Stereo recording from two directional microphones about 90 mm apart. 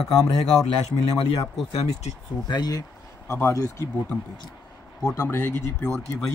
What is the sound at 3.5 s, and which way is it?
Speech, 40° left (ahead or behind).